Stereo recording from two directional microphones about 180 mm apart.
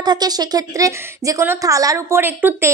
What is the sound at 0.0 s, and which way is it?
A woman's voice, 20° right (ahead or behind).